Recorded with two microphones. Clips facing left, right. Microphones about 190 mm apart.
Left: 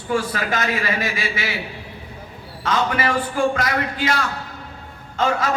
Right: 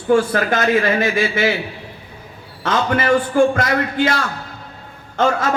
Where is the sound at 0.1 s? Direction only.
50° right (ahead or behind).